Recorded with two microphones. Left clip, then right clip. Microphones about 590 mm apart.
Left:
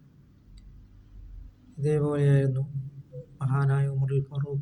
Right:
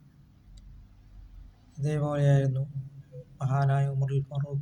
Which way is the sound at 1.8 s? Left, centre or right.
Right.